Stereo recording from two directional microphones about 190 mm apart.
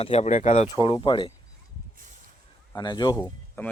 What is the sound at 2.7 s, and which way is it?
Speech, 20° left (ahead or behind).